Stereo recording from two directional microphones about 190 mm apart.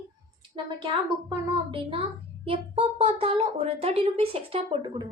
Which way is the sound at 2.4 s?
30° right (ahead or behind).